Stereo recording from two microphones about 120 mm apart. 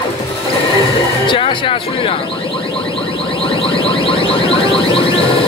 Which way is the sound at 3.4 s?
50° left (ahead or behind).